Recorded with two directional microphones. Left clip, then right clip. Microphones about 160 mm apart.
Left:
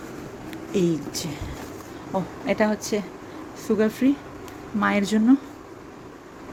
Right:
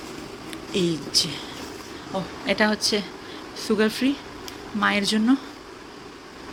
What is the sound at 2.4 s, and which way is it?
Speech, 15° left (ahead or behind).